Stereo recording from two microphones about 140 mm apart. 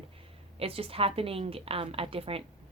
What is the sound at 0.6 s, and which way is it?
A woman's voice, 45° right (ahead or behind).